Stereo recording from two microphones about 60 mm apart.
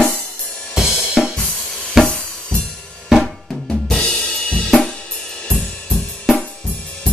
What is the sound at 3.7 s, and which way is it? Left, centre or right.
Drum kit, centre.